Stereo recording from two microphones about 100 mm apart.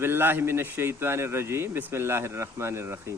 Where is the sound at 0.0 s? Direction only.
20° right (ahead or behind).